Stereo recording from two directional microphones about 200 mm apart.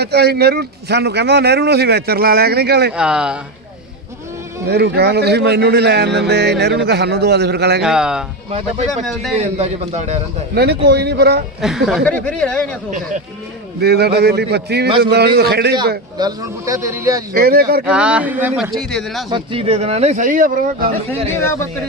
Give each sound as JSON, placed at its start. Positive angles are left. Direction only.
{"t": 0.0, "sound": "a man's voice", "side_deg": -55}
{"t": 2.9, "sound": "speech", "side_deg": -5}
{"t": 4.6, "sound": "speech", "side_deg": -55}
{"t": 7.8, "sound": "speech", "side_deg": -5}
{"t": 8.4, "sound": "speech", "side_deg": -30}
{"t": 10.5, "sound": "a man's voice", "side_deg": -50}
{"t": 11.6, "sound": "speech", "side_deg": 0}
{"t": 13.8, "sound": "a man's voice", "side_deg": -55}
{"t": 16.1, "sound": "a man's voice", "side_deg": -20}
{"t": 17.3, "sound": "a man's voice", "side_deg": -50}
{"t": 17.8, "sound": "a man's voice", "side_deg": -5}
{"t": 18.7, "sound": "speech", "side_deg": 0}
{"t": 19.3, "sound": "speech", "side_deg": -25}
{"t": 21.3, "sound": "speech", "side_deg": 15}